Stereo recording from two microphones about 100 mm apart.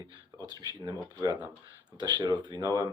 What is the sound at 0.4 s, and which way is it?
Speech, 40° right (ahead or behind).